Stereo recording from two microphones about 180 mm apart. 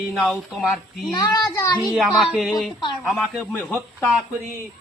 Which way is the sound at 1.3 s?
20° left (ahead or behind).